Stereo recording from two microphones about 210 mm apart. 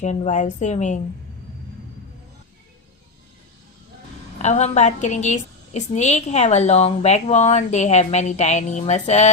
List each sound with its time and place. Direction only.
0.0 s a woman's voice: 35° left (ahead or behind)
4.4 s a woman's voice: 30° left (ahead or behind)